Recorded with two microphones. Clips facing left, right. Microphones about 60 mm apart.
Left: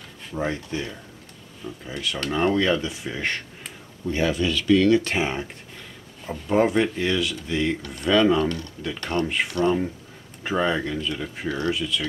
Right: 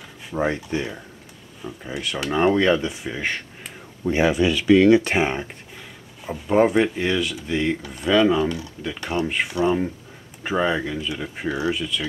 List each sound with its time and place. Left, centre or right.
0.3 s speech: centre
4.0 s speech: centre
5.2 s speech: centre